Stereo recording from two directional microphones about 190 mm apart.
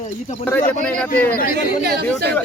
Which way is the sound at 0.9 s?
5° left (ahead or behind).